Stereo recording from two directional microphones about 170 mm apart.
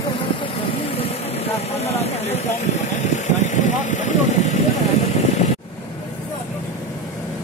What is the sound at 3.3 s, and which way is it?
Vehicle, 45° left (ahead or behind).